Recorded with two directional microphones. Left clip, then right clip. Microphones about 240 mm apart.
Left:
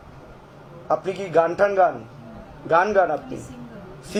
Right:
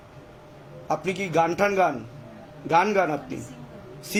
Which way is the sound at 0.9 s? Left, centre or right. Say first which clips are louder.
Left 3 dB; right.